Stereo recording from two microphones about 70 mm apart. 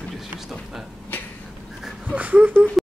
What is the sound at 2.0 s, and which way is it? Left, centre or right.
Speech, centre.